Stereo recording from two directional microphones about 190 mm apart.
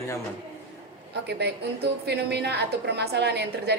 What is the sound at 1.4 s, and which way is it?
A woman's voice, 60° right (ahead or behind).